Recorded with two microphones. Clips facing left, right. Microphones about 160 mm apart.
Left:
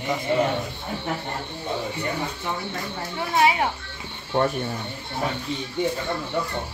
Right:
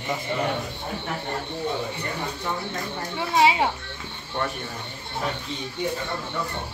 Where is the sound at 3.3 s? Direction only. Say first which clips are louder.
Right 1 dB; 20° right (ahead or behind).